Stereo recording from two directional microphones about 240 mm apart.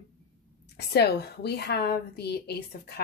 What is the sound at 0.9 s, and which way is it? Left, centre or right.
Speech, left.